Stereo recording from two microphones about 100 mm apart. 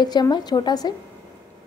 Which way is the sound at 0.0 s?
45° left (ahead or behind).